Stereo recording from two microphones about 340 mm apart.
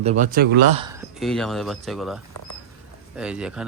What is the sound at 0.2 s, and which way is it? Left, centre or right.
Speech, right.